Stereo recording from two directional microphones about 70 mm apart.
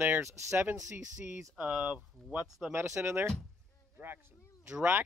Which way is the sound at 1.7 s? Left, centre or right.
Centre.